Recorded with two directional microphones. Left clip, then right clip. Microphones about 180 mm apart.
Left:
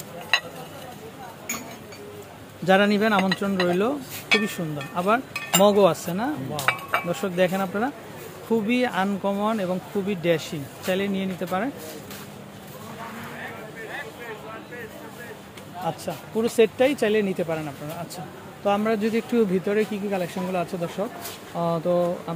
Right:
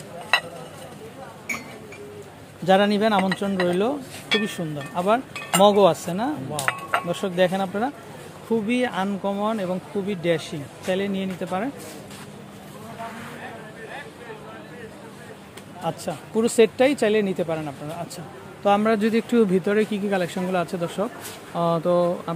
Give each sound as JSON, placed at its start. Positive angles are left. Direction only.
{"t": 2.6, "sound": "speech", "side_deg": -5}
{"t": 15.8, "sound": "speech", "side_deg": -20}
{"t": 18.1, "sound": "speech", "side_deg": -25}